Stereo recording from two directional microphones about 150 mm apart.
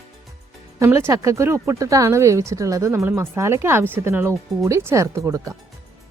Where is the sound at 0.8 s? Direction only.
15° right (ahead or behind).